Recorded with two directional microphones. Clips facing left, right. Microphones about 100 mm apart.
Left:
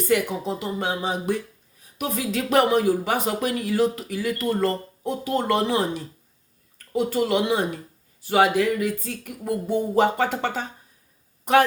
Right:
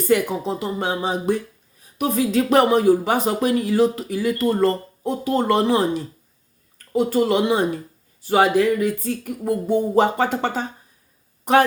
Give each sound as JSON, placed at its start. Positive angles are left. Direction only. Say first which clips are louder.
{"t": 0.1, "sound": "speech", "louder": "right 4 dB", "side_deg": -35}